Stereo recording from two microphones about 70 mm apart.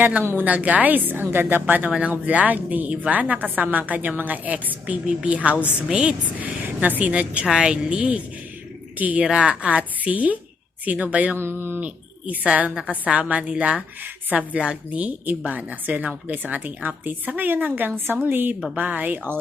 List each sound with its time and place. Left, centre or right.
0.0 s a woman's voice: right
9.2 s a woman's voice: centre
11.3 s speech: right
11.8 s a woman's voice: right